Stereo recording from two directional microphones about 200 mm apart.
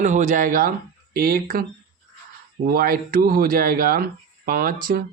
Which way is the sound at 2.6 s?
45° right (ahead or behind).